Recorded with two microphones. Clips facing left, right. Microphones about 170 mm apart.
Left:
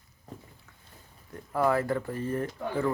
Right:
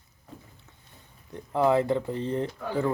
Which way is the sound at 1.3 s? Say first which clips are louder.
Right 3 dB; 20° right (ahead or behind).